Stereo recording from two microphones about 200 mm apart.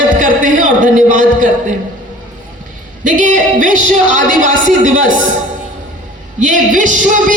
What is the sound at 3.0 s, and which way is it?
A woman's voice, 40° right (ahead or behind).